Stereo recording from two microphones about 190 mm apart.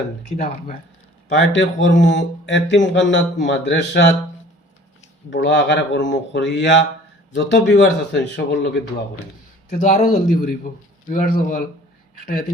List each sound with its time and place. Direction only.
0.3 s speech: 35° left (ahead or behind)
1.3 s speech: 70° left (ahead or behind)
5.3 s a man's voice: 70° left (ahead or behind)
9.6 s speech: 45° left (ahead or behind)